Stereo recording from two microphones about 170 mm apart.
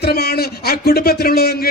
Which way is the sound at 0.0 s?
65° left (ahead or behind).